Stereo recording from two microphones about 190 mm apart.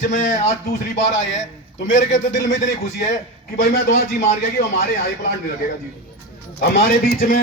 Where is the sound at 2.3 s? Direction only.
65° left (ahead or behind).